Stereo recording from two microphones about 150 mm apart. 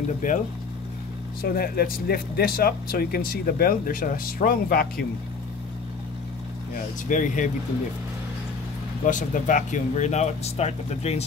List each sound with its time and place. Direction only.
0.2 s speech: 60° left (ahead or behind)
1.4 s speech: 90° left
6.7 s speech: 60° left (ahead or behind)
9.0 s speech: 60° left (ahead or behind)